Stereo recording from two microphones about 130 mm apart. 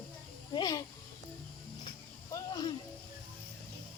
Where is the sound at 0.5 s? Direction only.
30° left (ahead or behind).